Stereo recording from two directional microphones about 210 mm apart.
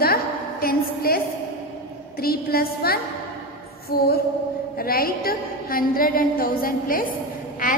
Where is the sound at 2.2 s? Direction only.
45° left (ahead or behind).